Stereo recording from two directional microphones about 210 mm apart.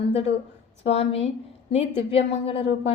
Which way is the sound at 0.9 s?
30° left (ahead or behind).